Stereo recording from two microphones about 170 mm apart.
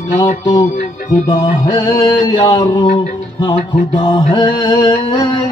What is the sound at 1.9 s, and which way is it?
Music, 30° left (ahead or behind).